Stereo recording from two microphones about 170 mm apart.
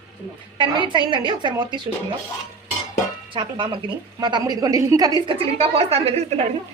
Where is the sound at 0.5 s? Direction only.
25° right (ahead or behind).